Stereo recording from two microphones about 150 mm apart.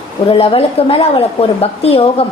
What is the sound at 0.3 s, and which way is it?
A woman's voice, 40° left (ahead or behind).